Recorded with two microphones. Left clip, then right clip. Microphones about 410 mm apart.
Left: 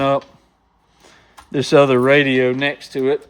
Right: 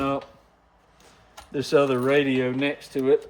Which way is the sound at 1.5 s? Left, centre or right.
Centre.